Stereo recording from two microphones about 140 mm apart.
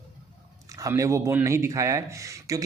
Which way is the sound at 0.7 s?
25° right (ahead or behind).